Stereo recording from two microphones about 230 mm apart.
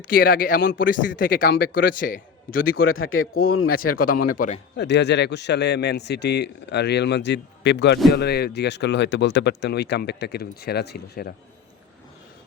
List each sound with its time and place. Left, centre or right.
0.1 s a man's voice: left
3.0 s speech: left
3.9 s a man's voice: left
4.8 s speech: left